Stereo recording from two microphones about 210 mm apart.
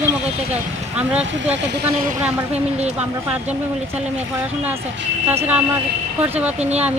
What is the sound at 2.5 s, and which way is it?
Speech, 30° right (ahead or behind).